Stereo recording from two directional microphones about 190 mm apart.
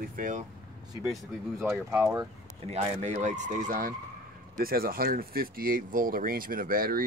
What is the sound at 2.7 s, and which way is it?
Speech, 35° right (ahead or behind).